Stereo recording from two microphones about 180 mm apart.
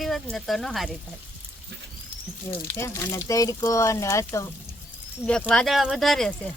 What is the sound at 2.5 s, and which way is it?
Speech, 15° left (ahead or behind).